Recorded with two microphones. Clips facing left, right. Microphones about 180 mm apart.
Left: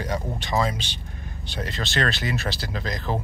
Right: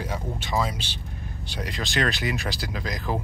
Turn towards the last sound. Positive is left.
turn(degrees=-10)  # may be behind; listen again after turning